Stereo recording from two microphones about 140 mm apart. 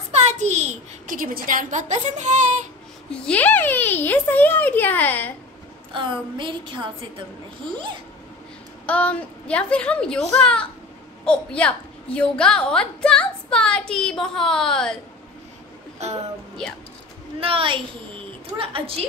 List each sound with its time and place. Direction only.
0.1 s a child's voice: 55° right (ahead or behind)
3.1 s a child's voice: 10° left (ahead or behind)
5.9 s a woman's voice: 35° right (ahead or behind)
8.8 s a child's voice: 10° left (ahead or behind)
16.0 s speech: 50° right (ahead or behind)
17.4 s a woman's voice: 40° right (ahead or behind)